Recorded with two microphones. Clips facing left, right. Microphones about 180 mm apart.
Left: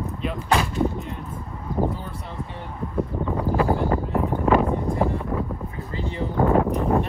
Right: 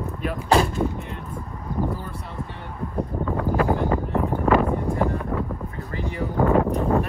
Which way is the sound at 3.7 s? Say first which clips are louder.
Even; 15° right (ahead or behind).